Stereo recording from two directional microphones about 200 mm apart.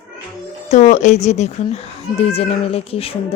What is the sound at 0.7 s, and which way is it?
A child's voice, 35° left (ahead or behind).